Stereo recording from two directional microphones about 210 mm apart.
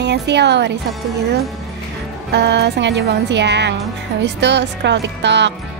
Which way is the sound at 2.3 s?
55° right (ahead or behind).